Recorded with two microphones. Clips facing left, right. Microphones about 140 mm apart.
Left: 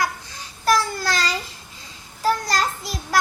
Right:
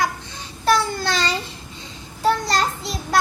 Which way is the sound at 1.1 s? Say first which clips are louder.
Right 1 dB; 25° right (ahead or behind).